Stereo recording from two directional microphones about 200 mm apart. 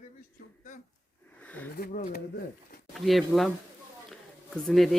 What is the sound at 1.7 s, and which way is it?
Speech, 50° left (ahead or behind).